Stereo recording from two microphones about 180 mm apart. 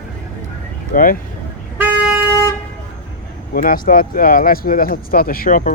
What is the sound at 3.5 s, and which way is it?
Speech, 50° left (ahead or behind).